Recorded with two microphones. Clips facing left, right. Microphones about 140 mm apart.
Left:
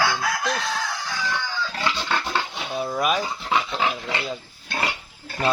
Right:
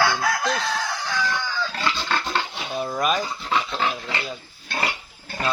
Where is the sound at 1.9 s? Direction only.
15° left (ahead or behind).